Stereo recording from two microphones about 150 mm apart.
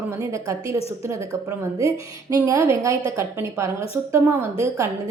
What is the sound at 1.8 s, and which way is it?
A woman's voice, 20° right (ahead or behind).